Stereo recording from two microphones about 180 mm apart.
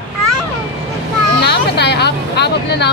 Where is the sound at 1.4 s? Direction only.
65° left (ahead or behind).